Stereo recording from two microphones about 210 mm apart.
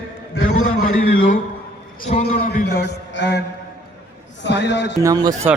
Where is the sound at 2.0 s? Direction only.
35° left (ahead or behind); by 3.4 s 55° left (ahead or behind).